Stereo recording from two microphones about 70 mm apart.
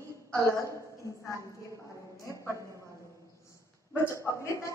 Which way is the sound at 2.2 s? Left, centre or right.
Left.